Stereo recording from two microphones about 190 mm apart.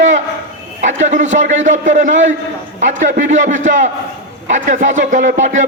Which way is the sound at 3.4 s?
40° right (ahead or behind).